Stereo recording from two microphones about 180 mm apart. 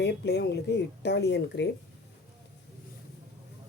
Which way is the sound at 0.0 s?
70° left (ahead or behind).